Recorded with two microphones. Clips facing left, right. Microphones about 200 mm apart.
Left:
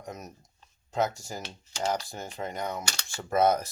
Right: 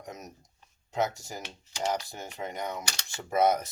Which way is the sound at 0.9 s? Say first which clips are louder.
Left 1 dB; 20° right (ahead or behind).